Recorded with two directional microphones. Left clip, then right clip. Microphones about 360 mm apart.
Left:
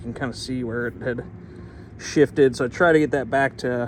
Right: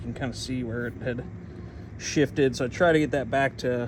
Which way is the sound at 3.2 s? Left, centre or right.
Left.